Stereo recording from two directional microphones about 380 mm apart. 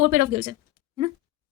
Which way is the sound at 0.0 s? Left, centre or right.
Right.